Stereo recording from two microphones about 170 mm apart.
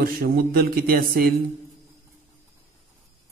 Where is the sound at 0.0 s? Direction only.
65° right (ahead or behind).